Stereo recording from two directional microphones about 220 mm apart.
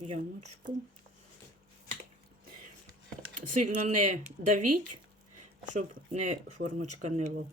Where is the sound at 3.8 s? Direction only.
35° right (ahead or behind).